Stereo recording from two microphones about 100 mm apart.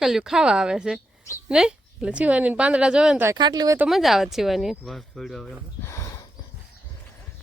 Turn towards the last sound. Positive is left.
turn(degrees=30)  # may be behind; listen again after turning